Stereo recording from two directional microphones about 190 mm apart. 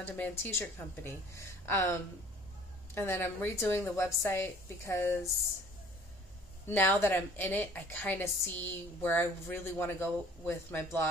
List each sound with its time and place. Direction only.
0.0 s a woman's voice: 10° left (ahead or behind)
6.7 s a woman's voice: 10° left (ahead or behind)